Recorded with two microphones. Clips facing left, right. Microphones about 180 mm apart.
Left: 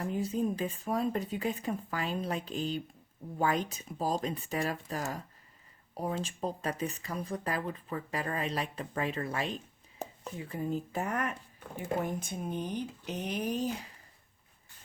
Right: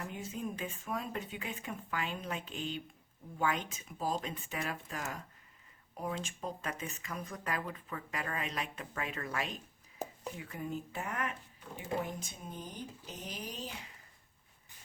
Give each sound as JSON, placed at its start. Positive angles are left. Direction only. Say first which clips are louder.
{"t": 0.0, "sound": "speech", "louder": "left 9 dB", "side_deg": 35}